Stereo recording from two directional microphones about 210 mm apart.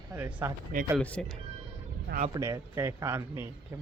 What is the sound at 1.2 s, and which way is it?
Speech, 5° left (ahead or behind).